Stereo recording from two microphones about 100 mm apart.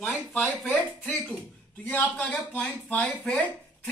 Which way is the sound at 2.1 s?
15° left (ahead or behind).